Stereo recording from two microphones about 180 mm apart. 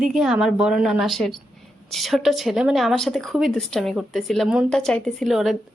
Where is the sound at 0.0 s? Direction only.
5° right (ahead or behind).